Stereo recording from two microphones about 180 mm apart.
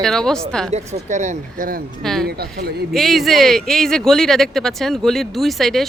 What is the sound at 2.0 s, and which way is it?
Speech, centre (ahead or behind).